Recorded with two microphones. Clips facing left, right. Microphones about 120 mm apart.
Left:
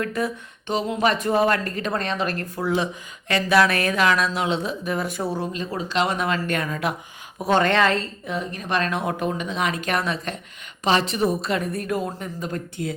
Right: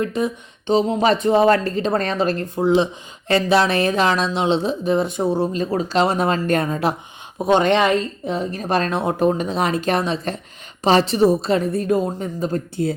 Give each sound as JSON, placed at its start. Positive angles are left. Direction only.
{"t": 0.0, "sound": "speech", "side_deg": -20}
{"t": 5.5, "sound": "speech", "side_deg": -40}
{"t": 7.3, "sound": "speech", "side_deg": -20}
{"t": 8.3, "sound": "speech", "side_deg": -30}